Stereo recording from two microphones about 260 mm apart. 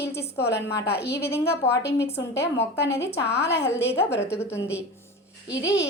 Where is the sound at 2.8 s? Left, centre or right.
Left.